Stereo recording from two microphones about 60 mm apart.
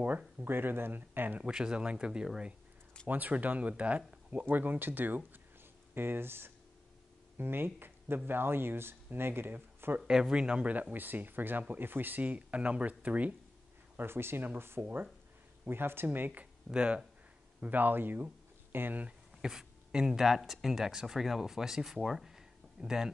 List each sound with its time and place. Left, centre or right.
0.4 s speech: right
1.5 s speech: centre
3.1 s speech: right
9.9 s speech: centre
13.9 s speech: right
16.6 s speech: centre
17.6 s speech: right
19.0 s speech: centre